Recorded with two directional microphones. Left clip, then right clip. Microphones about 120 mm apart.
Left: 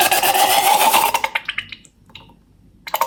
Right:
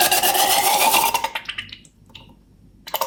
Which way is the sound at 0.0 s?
20° left (ahead or behind).